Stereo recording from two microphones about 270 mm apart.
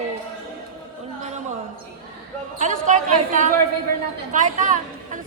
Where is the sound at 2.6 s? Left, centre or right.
Right.